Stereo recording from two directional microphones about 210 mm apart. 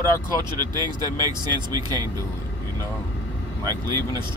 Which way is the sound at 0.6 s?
20° right (ahead or behind).